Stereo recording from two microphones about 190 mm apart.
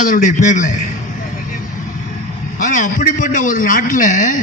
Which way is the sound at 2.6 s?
40° left (ahead or behind).